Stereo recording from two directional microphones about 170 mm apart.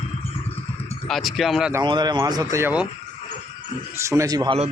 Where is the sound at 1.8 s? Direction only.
25° right (ahead or behind).